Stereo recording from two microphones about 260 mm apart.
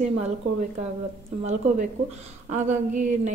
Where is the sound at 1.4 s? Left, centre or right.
Right.